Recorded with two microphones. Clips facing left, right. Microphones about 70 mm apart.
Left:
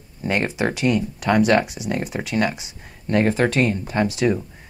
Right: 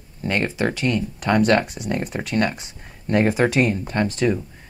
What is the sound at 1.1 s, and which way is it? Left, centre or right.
Speech, centre.